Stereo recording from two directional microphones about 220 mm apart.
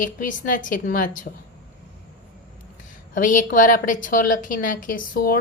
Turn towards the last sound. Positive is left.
turn(degrees=40)  # may be behind; listen again after turning